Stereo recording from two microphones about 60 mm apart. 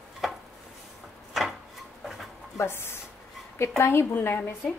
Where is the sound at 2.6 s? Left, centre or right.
Left.